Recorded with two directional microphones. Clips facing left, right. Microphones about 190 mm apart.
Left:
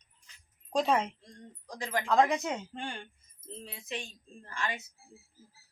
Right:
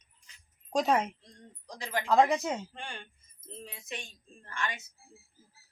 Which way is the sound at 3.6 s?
30° left (ahead or behind).